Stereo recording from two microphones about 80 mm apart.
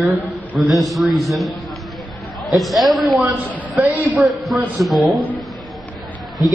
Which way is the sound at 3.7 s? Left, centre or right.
Right.